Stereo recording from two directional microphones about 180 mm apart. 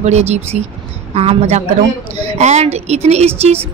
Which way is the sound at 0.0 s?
40° right (ahead or behind).